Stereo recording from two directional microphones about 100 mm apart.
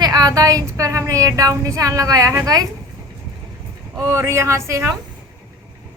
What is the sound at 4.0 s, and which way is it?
Speech, 30° right (ahead or behind).